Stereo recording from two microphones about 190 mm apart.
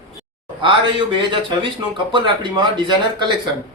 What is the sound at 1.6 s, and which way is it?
Speech, 25° right (ahead or behind).